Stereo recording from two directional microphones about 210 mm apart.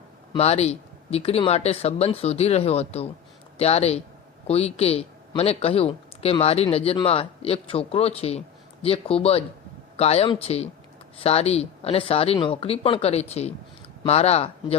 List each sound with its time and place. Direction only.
0.3 s speech: 30° left (ahead or behind)